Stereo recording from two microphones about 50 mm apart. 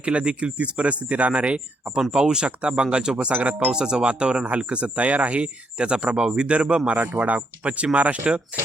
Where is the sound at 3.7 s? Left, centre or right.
Centre.